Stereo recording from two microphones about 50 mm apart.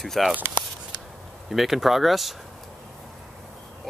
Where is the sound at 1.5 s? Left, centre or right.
Centre.